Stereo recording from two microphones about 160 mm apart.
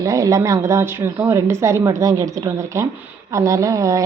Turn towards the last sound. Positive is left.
turn(degrees=-20)  # may be behind; listen again after turning